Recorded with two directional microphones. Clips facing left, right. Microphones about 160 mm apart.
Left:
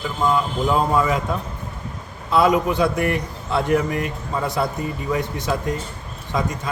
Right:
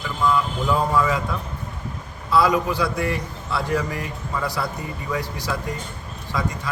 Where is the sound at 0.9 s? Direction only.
25° left (ahead or behind).